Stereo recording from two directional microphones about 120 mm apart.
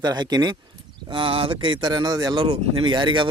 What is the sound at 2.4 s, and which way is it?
Speech, 50° right (ahead or behind).